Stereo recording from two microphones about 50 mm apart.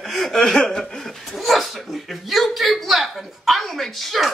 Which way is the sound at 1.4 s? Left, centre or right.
Centre.